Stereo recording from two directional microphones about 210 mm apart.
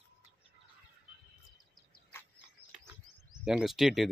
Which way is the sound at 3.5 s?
Centre (ahead or behind).